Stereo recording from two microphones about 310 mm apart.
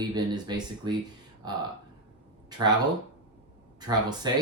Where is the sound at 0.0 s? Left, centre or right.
Centre.